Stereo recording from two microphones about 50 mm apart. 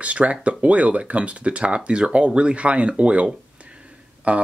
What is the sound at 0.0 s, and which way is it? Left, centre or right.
Speech, right.